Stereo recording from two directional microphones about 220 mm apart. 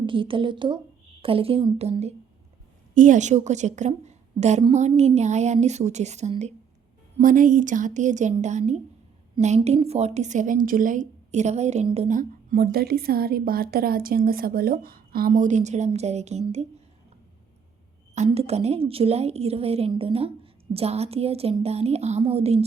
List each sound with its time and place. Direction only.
0.0 s a woman's voice: 25° right (ahead or behind)
18.1 s a woman's voice: 30° right (ahead or behind)